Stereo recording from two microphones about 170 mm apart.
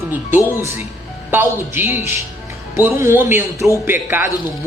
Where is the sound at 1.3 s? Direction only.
10° right (ahead or behind).